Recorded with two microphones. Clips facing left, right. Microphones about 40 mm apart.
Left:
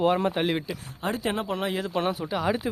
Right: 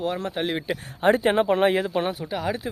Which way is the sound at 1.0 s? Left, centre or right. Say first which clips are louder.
Right 9 dB; right.